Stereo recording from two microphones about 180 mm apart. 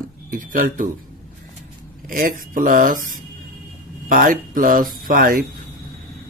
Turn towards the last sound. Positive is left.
turn(degrees=-50)  # may be behind; listen again after turning